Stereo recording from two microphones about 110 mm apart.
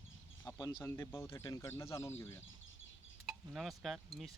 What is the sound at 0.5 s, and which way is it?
Chicken, 35° left (ahead or behind).